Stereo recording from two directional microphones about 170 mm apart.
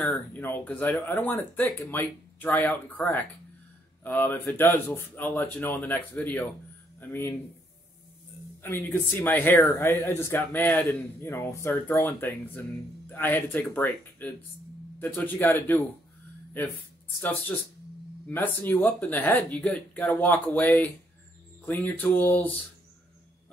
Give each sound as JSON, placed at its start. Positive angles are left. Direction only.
{"t": 0.0, "sound": "speech", "side_deg": 5}
{"t": 8.6, "sound": "speech", "side_deg": 10}